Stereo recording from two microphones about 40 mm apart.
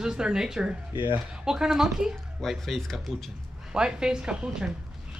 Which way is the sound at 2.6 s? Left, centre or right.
Centre.